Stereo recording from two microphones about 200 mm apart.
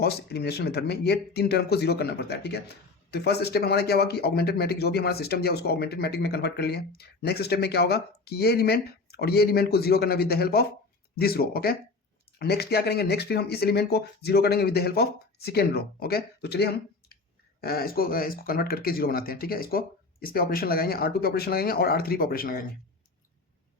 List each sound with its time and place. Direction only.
0.0 s speech: 50° left (ahead or behind)